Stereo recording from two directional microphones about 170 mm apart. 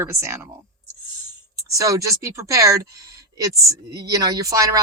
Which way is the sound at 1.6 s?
20° right (ahead or behind).